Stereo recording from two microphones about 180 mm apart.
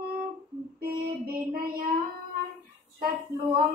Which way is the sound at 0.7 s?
55° right (ahead or behind).